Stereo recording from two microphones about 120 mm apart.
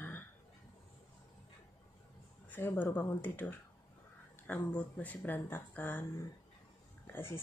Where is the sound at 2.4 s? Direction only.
15° left (ahead or behind).